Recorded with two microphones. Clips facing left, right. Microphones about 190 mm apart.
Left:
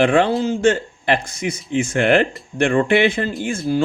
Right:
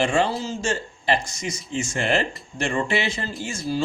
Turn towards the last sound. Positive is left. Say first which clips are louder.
# left 6 dB
turn(degrees=55)  # may be behind; listen again after turning